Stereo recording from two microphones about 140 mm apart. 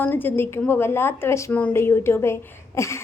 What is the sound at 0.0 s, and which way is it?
A woman's voice, 15° left (ahead or behind).